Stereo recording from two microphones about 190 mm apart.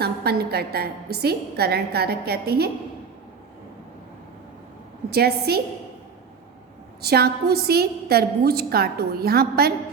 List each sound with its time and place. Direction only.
0.0 s a woman's voice: 55° right (ahead or behind)
5.1 s a woman's voice: 55° right (ahead or behind)
7.0 s a woman's voice: 55° right (ahead or behind)